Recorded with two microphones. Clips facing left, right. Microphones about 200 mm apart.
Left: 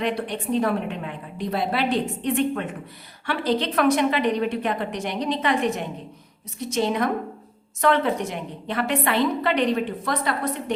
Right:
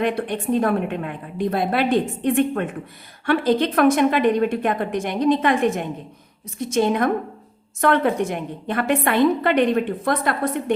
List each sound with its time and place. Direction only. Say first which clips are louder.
0.0 s a woman's voice: right 4 dB; 50° right (ahead or behind)